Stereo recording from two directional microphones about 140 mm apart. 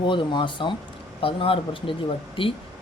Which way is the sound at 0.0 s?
35° left (ahead or behind).